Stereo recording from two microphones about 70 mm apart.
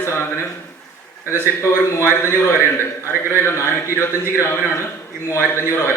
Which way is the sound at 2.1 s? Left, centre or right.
Left.